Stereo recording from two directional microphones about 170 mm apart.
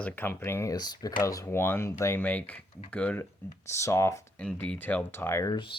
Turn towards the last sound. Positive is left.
turn(degrees=30)  # may be behind; listen again after turning